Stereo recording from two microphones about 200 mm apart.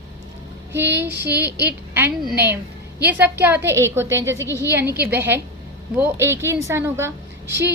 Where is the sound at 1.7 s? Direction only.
10° right (ahead or behind).